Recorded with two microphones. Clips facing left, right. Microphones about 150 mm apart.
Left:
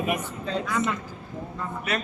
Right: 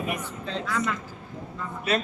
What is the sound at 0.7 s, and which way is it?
Speech, 20° left (ahead or behind).